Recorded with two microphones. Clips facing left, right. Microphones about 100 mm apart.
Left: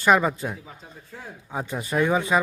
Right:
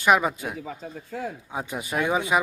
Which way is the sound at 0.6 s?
90° right.